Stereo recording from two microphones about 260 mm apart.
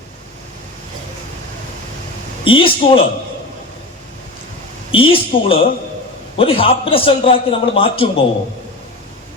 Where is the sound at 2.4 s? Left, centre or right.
Centre.